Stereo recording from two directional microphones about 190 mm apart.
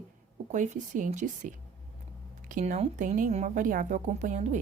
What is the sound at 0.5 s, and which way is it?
A woman's voice, 40° right (ahead or behind).